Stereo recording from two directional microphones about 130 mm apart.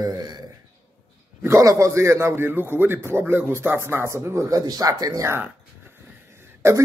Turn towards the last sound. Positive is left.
turn(degrees=-20)  # may be behind; listen again after turning